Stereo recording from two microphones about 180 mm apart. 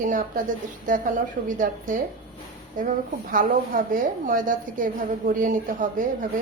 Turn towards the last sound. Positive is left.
turn(degrees=-45)  # may be behind; listen again after turning